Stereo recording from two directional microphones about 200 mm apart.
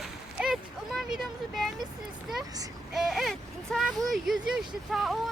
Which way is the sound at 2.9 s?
Centre (ahead or behind).